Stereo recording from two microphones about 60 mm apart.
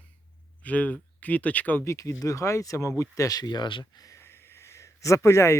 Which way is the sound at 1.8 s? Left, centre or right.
Left.